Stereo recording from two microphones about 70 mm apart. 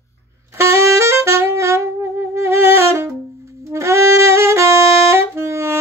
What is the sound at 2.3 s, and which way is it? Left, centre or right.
Music, right.